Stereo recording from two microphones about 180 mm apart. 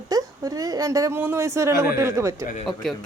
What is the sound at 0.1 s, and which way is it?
A woman's voice, 20° right (ahead or behind).